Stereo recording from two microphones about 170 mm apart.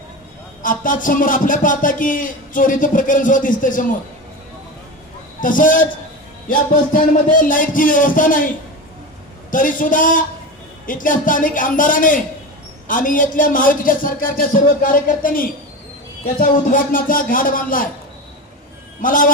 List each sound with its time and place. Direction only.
0.6 s a man's voice: 50° left (ahead or behind)
5.4 s a man's voice: 50° left (ahead or behind)
9.5 s a man's voice: 50° left (ahead or behind)
18.9 s a man's voice: 55° left (ahead or behind)